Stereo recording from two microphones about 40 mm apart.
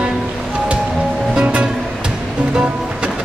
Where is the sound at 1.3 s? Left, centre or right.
Right.